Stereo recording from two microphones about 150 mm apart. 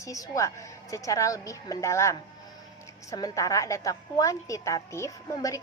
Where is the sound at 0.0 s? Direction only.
20° left (ahead or behind).